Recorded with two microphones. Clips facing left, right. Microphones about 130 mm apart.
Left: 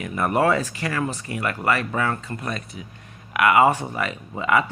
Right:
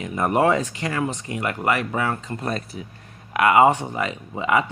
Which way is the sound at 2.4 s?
35° right (ahead or behind).